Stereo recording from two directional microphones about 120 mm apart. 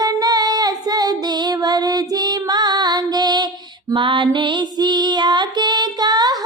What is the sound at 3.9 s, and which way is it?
Female singing, 40° right (ahead or behind).